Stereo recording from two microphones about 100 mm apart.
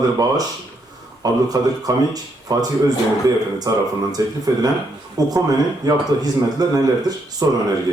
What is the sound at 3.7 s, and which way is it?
Speech, 35° right (ahead or behind).